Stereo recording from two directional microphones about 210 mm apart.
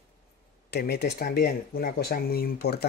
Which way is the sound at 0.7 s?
50° left (ahead or behind).